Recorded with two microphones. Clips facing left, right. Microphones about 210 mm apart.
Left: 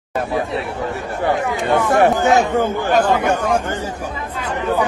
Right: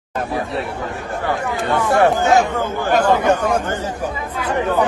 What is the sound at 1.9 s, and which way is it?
Speech, 20° left (ahead or behind).